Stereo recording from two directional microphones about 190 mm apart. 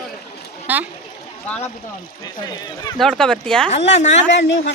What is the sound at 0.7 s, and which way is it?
Speech, 10° right (ahead or behind).